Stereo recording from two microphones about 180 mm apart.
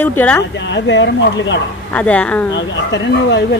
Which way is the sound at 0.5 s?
80° left.